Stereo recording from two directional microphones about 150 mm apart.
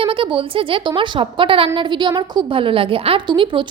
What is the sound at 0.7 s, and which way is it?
A woman's voice, 35° right (ahead or behind).